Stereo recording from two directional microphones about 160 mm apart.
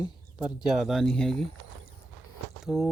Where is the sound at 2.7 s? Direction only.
Centre (ahead or behind).